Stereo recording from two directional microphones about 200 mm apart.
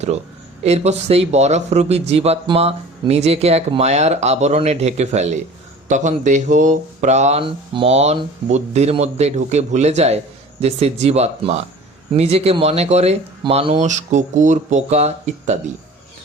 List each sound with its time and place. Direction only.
0.6 s speech: 30° right (ahead or behind)